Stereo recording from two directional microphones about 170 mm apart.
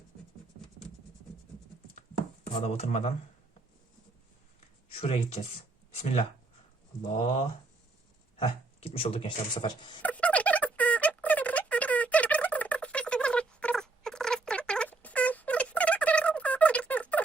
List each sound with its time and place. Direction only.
2.6 s speech: 35° left (ahead or behind)
4.9 s speech: 35° left (ahead or behind)
8.4 s speech: 35° left (ahead or behind)
10.0 s a sound: 10° left (ahead or behind)